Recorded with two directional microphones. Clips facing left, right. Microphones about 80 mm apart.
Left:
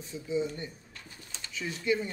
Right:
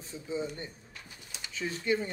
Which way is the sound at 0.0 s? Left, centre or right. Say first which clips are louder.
Left 4 dB; right.